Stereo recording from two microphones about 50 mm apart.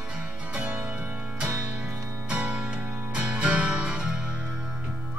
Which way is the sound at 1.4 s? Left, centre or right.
Right.